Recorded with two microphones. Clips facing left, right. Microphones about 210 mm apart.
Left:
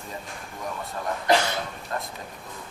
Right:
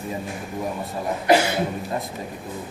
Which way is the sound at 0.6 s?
20° right (ahead or behind).